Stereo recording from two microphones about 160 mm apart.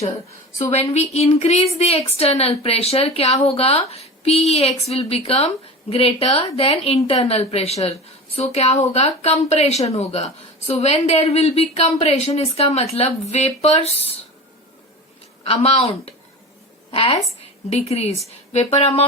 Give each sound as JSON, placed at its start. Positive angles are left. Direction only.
{"t": 0.6, "sound": "a woman's voice", "side_deg": 45}
{"t": 15.6, "sound": "a woman's voice", "side_deg": 40}